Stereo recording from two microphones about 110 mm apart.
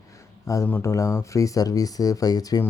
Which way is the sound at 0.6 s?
20° left (ahead or behind).